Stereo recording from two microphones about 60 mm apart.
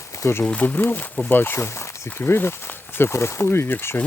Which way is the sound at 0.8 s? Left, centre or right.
Left.